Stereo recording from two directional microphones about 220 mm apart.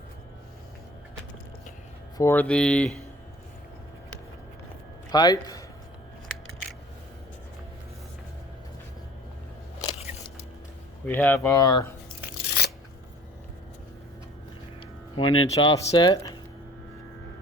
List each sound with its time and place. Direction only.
2.1 s speech: 10° left (ahead or behind)
5.1 s speech: 20° left (ahead or behind)
11.0 s speech: 10° left (ahead or behind)
12.6 s scissors: 50° left (ahead or behind)
15.2 s speech: 70° left (ahead or behind)
15.5 s speech: 15° left (ahead or behind)